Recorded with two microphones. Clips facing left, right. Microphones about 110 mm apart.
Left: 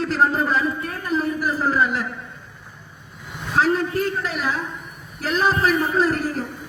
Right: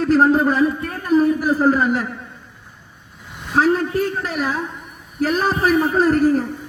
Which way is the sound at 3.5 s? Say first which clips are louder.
Right 3 dB; 45° right (ahead or behind).